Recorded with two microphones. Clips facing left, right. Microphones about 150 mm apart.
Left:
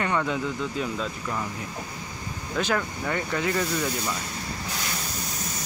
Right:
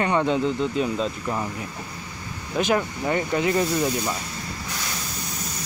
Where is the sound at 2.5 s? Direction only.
20° right (ahead or behind).